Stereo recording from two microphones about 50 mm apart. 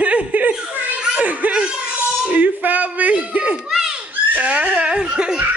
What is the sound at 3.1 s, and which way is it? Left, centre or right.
Speech, right.